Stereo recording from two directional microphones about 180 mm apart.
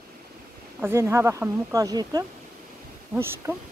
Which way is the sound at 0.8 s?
15° right (ahead or behind).